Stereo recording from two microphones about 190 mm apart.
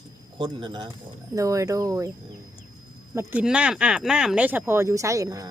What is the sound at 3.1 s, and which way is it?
Speech, 5° right (ahead or behind).